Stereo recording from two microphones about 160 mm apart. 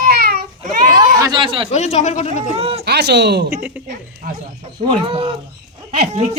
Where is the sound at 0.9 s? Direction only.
25° right (ahead or behind).